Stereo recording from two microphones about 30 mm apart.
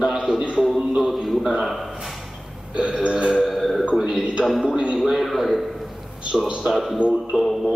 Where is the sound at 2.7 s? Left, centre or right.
Right.